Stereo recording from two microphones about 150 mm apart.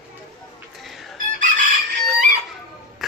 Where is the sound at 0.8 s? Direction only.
Centre (ahead or behind).